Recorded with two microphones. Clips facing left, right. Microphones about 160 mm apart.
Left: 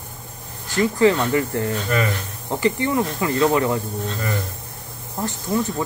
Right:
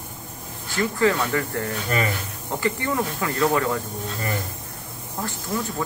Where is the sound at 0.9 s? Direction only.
20° left (ahead or behind).